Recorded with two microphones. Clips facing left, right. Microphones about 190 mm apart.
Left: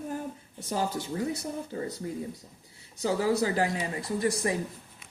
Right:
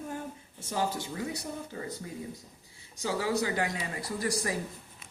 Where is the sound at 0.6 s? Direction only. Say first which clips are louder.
Left 2 dB; 35° left (ahead or behind).